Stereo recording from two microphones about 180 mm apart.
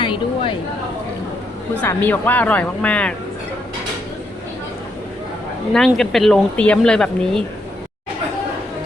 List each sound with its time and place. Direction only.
0.0 s a sound: 25° left (ahead or behind)
1.8 s speech: 10° left (ahead or behind)
5.7 s speech: 5° left (ahead or behind)